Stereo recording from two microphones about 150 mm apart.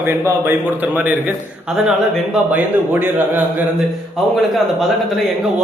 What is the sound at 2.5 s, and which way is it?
Speech, 10° right (ahead or behind).